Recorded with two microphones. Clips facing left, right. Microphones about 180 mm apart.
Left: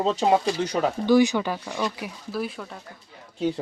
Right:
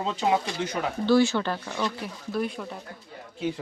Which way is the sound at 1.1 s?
15° left (ahead or behind).